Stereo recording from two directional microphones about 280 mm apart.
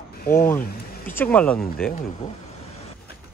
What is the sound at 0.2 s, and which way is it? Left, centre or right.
Speech, left.